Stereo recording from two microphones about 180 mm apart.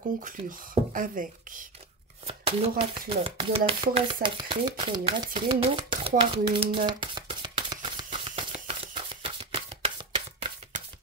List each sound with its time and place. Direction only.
0.2 s speech: 45° right (ahead or behind)
2.2 s shuffling cards: 35° right (ahead or behind)
2.8 s speech: 30° right (ahead or behind)
6.9 s a sound: 25° right (ahead or behind)